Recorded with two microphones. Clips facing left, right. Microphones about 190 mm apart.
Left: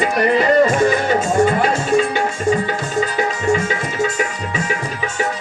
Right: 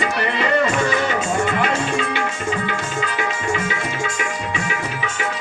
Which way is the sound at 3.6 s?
40° left (ahead or behind).